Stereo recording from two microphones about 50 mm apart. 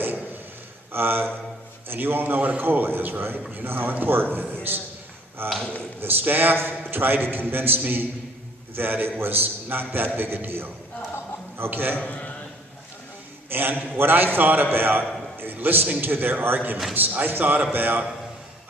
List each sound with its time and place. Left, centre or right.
0.9 s a man's voice: right
11.7 s a man's voice: right
11.9 s a man's voice: left
13.5 s a man's voice: right